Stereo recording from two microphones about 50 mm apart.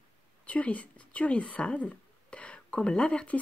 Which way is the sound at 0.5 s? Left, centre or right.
Left.